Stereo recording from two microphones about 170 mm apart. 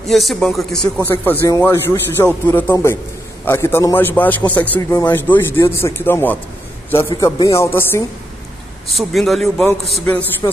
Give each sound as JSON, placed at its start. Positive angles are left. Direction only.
{"t": 0.1, "sound": "speech", "side_deg": 0}
{"t": 8.8, "sound": "a man's voice", "side_deg": 0}